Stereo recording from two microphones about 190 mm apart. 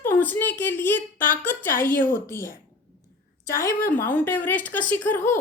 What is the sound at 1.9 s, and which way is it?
Speech, 45° left (ahead or behind).